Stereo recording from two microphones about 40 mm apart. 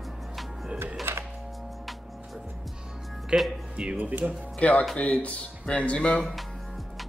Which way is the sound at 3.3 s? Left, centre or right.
Right.